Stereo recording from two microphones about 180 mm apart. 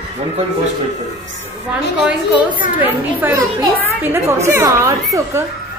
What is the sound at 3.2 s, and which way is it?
A woman's voice, 15° right (ahead or behind).